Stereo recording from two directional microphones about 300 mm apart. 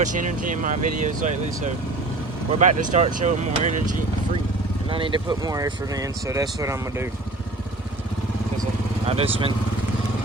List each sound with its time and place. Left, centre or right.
0.0 s speech: right
4.9 s speech: centre
9.0 s speech: centre